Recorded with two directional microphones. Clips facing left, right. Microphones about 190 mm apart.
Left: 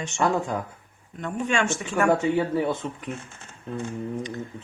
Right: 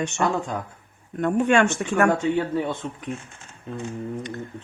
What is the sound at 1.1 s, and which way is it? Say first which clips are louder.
Speech: right 7 dB; 55° right (ahead or behind).